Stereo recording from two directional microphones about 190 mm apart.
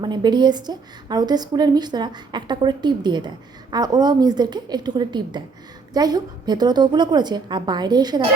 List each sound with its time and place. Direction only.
0.0 s a woman's voice: 25° right (ahead or behind)